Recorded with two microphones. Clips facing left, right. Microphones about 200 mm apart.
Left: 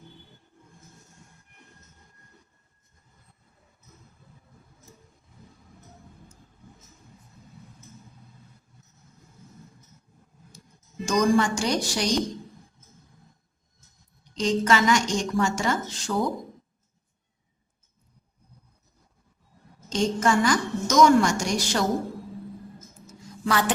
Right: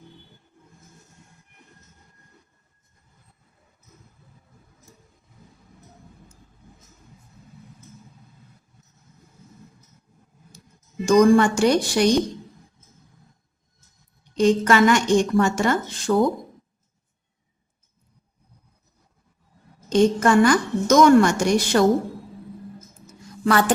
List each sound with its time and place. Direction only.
11.0 s a woman's voice: 55° right (ahead or behind)
14.3 s a woman's voice: 55° right (ahead or behind)
19.9 s a woman's voice: 55° right (ahead or behind)
23.5 s a sound: 50° right (ahead or behind)